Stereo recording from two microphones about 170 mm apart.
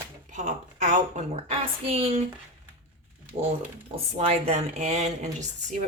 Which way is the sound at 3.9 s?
35° right (ahead or behind).